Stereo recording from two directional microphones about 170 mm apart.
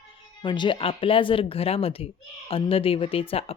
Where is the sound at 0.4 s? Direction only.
25° left (ahead or behind).